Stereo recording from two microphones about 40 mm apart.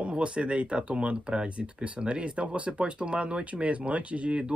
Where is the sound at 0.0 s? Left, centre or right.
Right.